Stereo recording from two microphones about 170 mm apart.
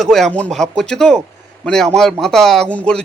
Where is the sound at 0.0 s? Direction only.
Centre (ahead or behind).